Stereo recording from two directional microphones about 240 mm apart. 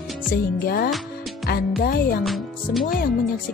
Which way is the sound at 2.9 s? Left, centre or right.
Left.